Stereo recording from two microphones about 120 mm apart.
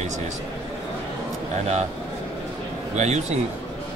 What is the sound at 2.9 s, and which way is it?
Speech, 70° right (ahead or behind).